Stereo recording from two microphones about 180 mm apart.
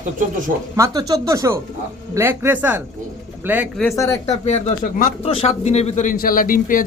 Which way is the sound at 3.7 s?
Centre (ahead or behind).